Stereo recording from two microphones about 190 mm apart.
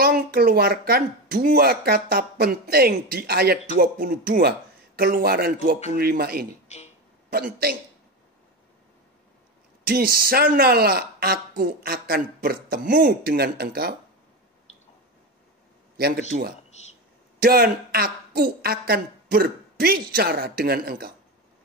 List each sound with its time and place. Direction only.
0.0 s speech: 50° right (ahead or behind)
6.7 s speech: 35° left (ahead or behind)
9.8 s speech: 50° right (ahead or behind)
16.0 s speech: 50° right (ahead or behind)